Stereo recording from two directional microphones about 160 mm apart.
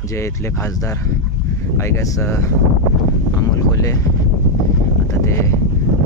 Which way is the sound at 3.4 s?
20° left (ahead or behind).